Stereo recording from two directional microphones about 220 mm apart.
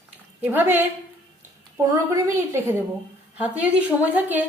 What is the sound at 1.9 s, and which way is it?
A woman's voice, 10° right (ahead or behind).